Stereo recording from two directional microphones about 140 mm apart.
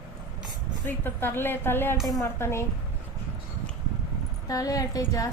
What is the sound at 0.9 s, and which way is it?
A woman's voice, 15° left (ahead or behind).